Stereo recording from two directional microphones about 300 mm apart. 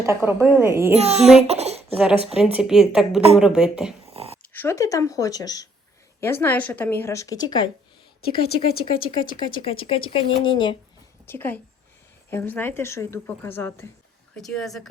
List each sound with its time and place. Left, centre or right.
0.0 s a woman's voice: centre
0.9 s a child's voice: right
1.5 s a sound: right
2.0 s a woman's voice: centre
4.1 s dog: centre
4.5 s speech: centre
8.8 s a woman's voice: centre